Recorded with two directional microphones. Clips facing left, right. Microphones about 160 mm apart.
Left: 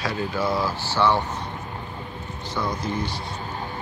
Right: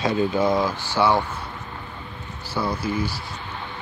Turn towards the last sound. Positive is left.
turn(degrees=-5)  # may be behind; listen again after turning